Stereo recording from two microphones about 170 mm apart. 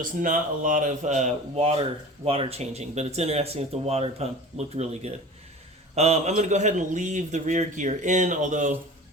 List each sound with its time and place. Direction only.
0.2 s a man's voice: 50° right (ahead or behind)